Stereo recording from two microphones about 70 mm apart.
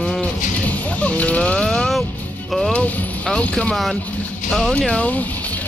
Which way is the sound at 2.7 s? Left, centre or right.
Left.